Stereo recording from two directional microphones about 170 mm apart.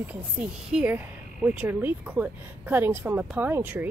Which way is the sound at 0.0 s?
10° right (ahead or behind).